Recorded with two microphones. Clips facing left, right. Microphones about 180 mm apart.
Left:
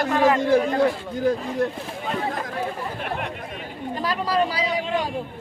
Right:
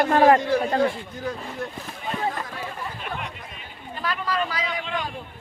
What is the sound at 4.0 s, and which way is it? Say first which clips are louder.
Speech: left 4 dB; 35° left (ahead or behind).